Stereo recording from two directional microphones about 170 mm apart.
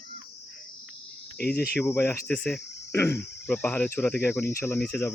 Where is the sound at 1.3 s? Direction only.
65° left (ahead or behind).